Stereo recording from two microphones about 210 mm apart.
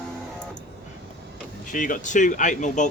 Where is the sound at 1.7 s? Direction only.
40° left (ahead or behind).